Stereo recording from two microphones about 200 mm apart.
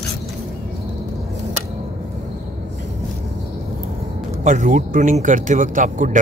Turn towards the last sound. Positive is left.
turn(degrees=-40)  # may be behind; listen again after turning